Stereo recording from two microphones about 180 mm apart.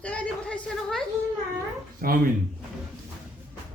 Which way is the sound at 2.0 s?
55° right (ahead or behind).